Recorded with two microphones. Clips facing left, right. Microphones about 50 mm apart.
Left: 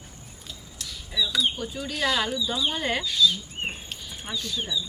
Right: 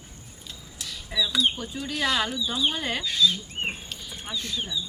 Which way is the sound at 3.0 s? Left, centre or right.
Right.